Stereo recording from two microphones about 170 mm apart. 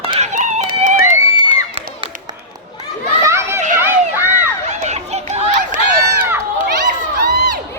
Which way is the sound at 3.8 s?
10° right (ahead or behind).